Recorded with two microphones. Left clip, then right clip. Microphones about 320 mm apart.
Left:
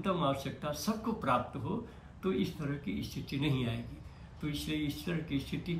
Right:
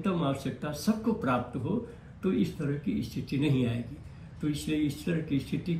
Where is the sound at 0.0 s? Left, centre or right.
Centre.